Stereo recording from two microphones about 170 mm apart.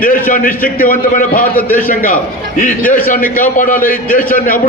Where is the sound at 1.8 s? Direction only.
55° left (ahead or behind).